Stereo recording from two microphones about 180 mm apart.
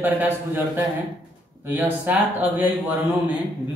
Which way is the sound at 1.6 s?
10° right (ahead or behind).